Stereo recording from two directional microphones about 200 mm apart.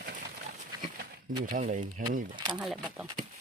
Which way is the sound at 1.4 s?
40° right (ahead or behind).